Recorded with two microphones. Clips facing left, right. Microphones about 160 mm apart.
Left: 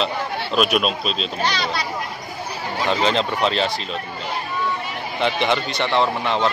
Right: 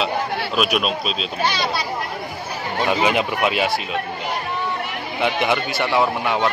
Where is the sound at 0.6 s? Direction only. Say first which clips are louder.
Left 2 dB; centre (ahead or behind).